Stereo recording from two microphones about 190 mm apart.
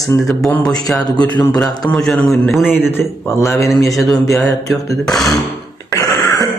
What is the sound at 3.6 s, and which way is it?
A man's voice, centre (ahead or behind).